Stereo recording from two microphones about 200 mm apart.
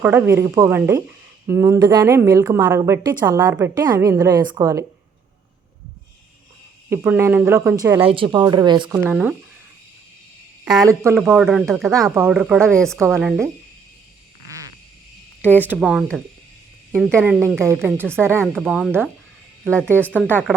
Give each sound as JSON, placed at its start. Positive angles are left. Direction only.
{"t": 0.0, "sound": "a woman's voice", "side_deg": -10}
{"t": 6.9, "sound": "a woman's voice", "side_deg": -10}
{"t": 8.0, "sound": "speech", "side_deg": -25}
{"t": 9.0, "sound": "speech", "side_deg": -5}
{"t": 10.8, "sound": "a woman's voice", "side_deg": -10}
{"t": 15.6, "sound": "speech", "side_deg": -5}
{"t": 16.9, "sound": "a woman's voice", "side_deg": -10}
{"t": 18.5, "sound": "speech", "side_deg": 0}
{"t": 20.1, "sound": "a woman's voice", "side_deg": -10}